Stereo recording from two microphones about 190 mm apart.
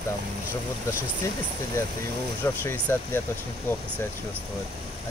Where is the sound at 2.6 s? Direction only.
10° left (ahead or behind).